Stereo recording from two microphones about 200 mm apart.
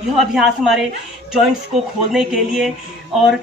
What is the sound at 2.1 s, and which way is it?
Speech, 5° right (ahead or behind).